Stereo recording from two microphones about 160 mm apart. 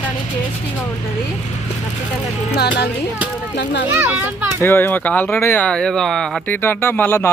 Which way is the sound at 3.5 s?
90° left.